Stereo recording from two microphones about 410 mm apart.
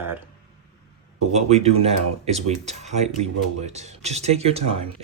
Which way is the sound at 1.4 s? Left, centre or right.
Centre.